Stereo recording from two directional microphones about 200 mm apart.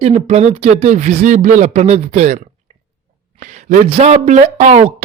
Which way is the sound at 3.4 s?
35° right (ahead or behind).